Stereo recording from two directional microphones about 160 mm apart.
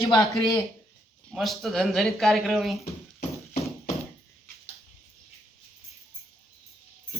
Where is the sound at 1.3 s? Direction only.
Centre (ahead or behind).